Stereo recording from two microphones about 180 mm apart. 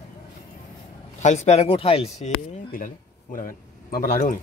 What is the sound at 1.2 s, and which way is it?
Speech, 40° left (ahead or behind).